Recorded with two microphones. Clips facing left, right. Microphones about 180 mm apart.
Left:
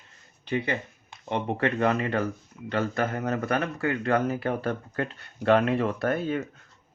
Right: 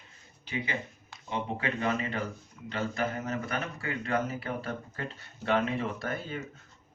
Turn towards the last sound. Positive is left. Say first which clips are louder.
# left 9 dB
turn(degrees=60)  # may be behind; listen again after turning